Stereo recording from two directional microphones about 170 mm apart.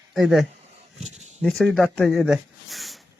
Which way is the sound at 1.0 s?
40° right (ahead or behind).